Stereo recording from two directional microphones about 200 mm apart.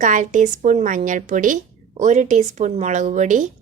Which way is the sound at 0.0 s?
40° right (ahead or behind).